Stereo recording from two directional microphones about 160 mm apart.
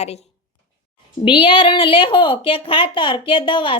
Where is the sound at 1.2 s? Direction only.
30° left (ahead or behind).